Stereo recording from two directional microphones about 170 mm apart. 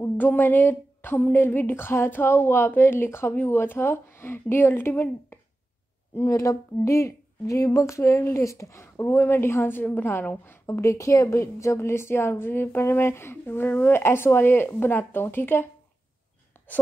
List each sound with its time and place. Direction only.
0.0 s speech: 10° left (ahead or behind)
16.5 s whispering: 10° left (ahead or behind)